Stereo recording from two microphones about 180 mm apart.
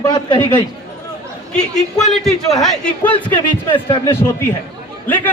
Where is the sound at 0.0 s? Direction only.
25° left (ahead or behind).